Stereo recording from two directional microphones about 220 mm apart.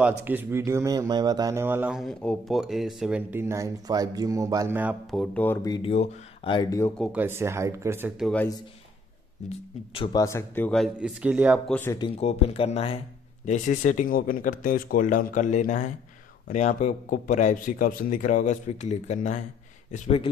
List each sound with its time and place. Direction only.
0.0 s speech: 10° right (ahead or behind); by 5.8 s 10° left (ahead or behind)
5.9 s speech: 25° left (ahead or behind)
7.0 s speech: 5° right (ahead or behind)
9.9 s speech: 20° left (ahead or behind); by 11.7 s 5° right (ahead or behind)
11.7 s speech: 10° left (ahead or behind)
12.0 s speech: 25° left (ahead or behind)